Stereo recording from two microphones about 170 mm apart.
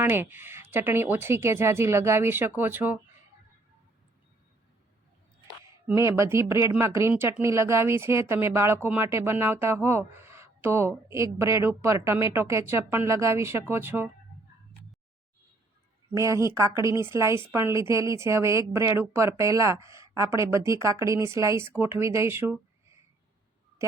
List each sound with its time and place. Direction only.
0.0 s speech: 10° right (ahead or behind)
5.9 s speech: 15° right (ahead or behind)
16.1 s speech: 20° right (ahead or behind)